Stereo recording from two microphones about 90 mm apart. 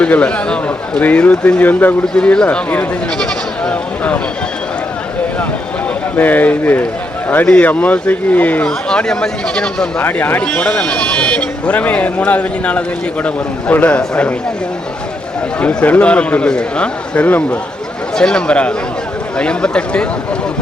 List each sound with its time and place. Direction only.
0.0 s speech: 15° left (ahead or behind)
3.7 s a sound: 15° left (ahead or behind)
6.1 s speech: 20° left (ahead or behind)
10.0 s speech: 20° left (ahead or behind)
15.6 s speech: 15° left (ahead or behind)